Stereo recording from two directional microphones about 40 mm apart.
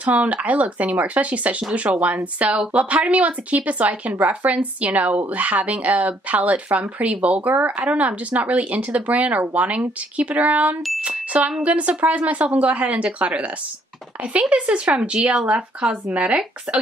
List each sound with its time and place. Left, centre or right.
0.0 s speech: right
7.4 s speech: right
7.8 s speech: right
14.5 s speech: right
14.9 s speech: centre
15.4 s speech: right